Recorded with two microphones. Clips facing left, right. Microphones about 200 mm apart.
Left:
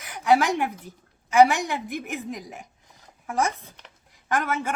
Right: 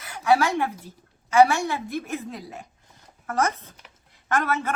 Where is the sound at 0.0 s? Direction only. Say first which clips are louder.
Even; 15° left (ahead or behind).